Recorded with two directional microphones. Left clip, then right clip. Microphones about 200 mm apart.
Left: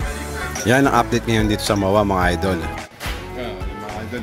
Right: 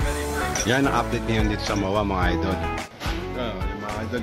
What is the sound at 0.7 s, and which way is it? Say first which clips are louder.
Speech: left 8 dB; 35° left (ahead or behind).